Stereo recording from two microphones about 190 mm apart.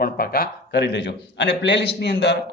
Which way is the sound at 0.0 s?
50° left (ahead or behind).